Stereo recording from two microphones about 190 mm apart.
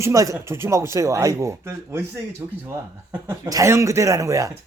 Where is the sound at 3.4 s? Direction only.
15° right (ahead or behind).